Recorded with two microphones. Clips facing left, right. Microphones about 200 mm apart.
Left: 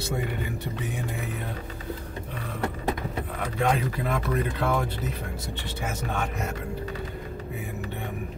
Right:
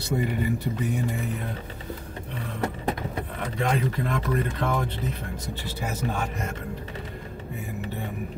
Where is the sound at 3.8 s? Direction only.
5° left (ahead or behind).